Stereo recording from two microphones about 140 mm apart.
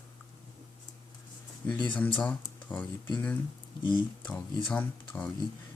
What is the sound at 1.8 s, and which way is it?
Speech, 10° left (ahead or behind).